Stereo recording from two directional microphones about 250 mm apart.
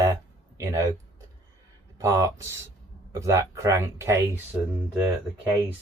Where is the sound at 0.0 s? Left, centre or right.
Centre.